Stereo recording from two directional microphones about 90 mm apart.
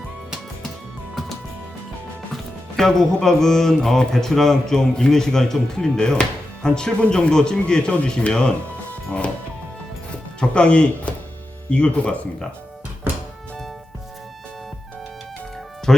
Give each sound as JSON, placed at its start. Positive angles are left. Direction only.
{"t": 2.3, "sound": "music", "side_deg": 5}
{"t": 10.5, "sound": "music", "side_deg": 10}
{"t": 15.9, "sound": "speech", "side_deg": 5}